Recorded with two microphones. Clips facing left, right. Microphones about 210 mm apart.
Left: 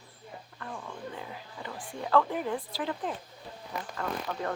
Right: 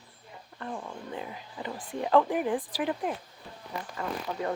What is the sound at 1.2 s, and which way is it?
Speech, 20° right (ahead or behind).